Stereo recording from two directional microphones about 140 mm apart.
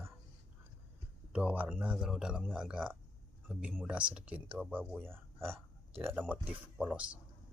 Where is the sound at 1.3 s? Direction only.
10° right (ahead or behind).